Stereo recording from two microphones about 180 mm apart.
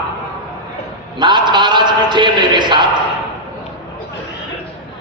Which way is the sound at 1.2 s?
25° right (ahead or behind).